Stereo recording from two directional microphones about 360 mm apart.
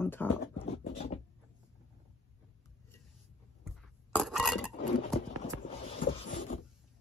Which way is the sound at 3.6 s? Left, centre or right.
Centre.